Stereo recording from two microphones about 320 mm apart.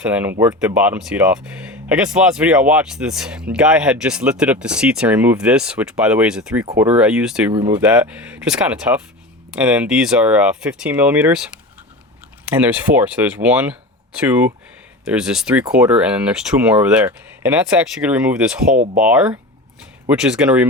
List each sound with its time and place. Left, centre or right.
0.0 s speech: centre
12.5 s speech: centre